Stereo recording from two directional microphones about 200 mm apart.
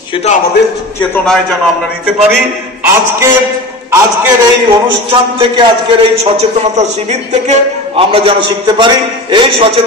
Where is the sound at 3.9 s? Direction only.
15° right (ahead or behind).